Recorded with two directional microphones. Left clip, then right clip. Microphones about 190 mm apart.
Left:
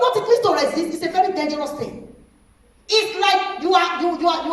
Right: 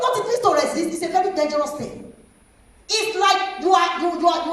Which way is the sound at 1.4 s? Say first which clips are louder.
Right 2 dB; 40° right (ahead or behind).